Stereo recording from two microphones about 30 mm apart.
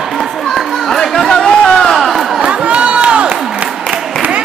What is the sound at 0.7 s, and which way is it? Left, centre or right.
Chatter, centre.